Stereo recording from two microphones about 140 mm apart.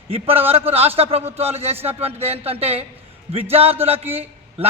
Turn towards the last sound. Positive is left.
turn(degrees=-45)  # may be behind; listen again after turning